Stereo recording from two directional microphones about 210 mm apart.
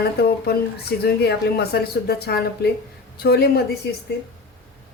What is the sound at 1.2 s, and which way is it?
A woman's voice, 50° left (ahead or behind).